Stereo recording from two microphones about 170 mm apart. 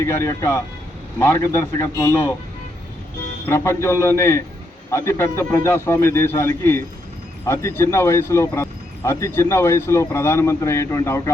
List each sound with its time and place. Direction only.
0.0 s speech: 15° left (ahead or behind)
3.5 s speech: 15° left (ahead or behind)